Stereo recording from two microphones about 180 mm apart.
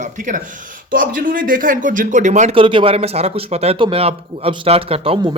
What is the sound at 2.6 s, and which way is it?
Speech, 30° right (ahead or behind).